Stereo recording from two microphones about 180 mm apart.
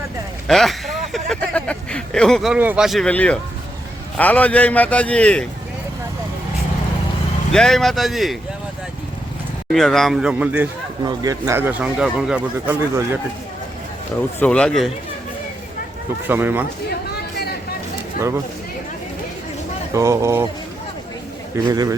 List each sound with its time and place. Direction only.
0.4 s a sound: centre (ahead or behind)
4.2 s a man's voice: 10° left (ahead or behind)
7.5 s a man's voice: centre (ahead or behind)
9.7 s a man's voice: centre (ahead or behind)
11.0 s speech: 20° right (ahead or behind)
14.3 s a man's voice: 5° left (ahead or behind)
16.2 s speech: 10° right (ahead or behind)
17.3 s vehicle: 60° left (ahead or behind)
19.9 s speech: 15° right (ahead or behind)
21.5 s a man's voice: 20° right (ahead or behind)